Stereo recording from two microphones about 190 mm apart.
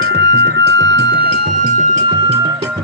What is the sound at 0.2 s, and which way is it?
Music, 70° right (ahead or behind).